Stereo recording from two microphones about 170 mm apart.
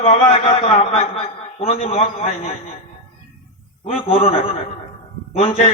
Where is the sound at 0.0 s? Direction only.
35° left (ahead or behind).